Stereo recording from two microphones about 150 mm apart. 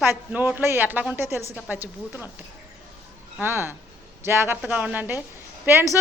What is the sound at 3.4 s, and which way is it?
A woman's voice, 15° right (ahead or behind).